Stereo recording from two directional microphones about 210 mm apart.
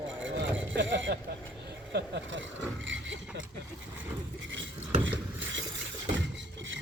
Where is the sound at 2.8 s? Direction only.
60° right (ahead or behind).